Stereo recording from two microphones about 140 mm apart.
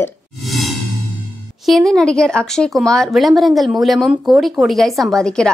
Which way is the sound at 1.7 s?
Centre (ahead or behind).